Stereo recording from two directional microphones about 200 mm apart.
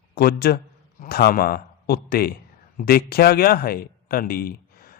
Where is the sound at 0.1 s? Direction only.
50° left (ahead or behind).